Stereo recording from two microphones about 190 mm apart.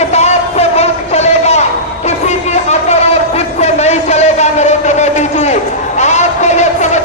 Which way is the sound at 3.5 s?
35° left (ahead or behind).